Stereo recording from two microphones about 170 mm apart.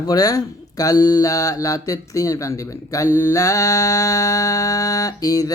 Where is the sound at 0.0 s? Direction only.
20° left (ahead or behind).